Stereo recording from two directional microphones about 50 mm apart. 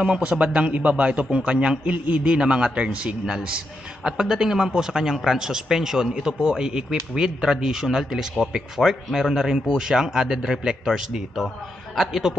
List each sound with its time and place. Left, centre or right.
0.0 s a man's voice: right
10.9 s a man's voice: centre